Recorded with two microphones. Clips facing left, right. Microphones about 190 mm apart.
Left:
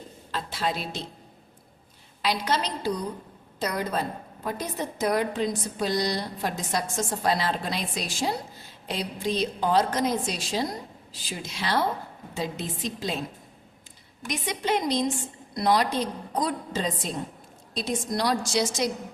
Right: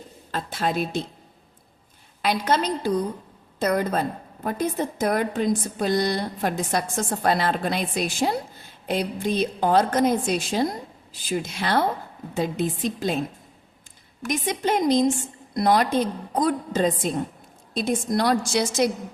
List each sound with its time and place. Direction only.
0.3 s a woman's voice: 50° right (ahead or behind)
2.2 s a woman's voice: 50° right (ahead or behind)
14.3 s a woman's voice: 50° right (ahead or behind)